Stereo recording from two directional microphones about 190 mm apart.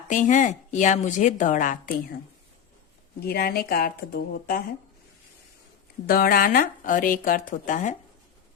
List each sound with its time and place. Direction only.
0.1 s speech: 40° left (ahead or behind)
3.2 s speech: 55° left (ahead or behind)
6.1 s speech: 50° left (ahead or behind)